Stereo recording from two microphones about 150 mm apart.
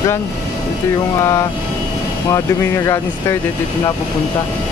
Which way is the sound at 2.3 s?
20° left (ahead or behind).